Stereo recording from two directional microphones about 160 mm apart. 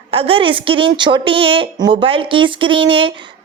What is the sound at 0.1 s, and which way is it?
A woman's voice, 35° right (ahead or behind).